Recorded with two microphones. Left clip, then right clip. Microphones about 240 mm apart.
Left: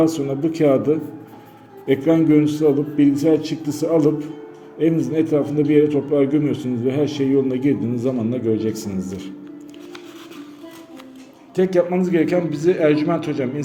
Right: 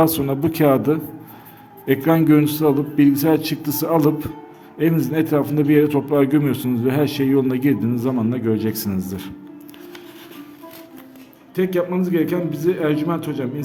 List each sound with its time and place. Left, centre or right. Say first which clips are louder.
0.0 s a man's voice: right 1 dB; right
11.5 s a man's voice: left 3 dB; centre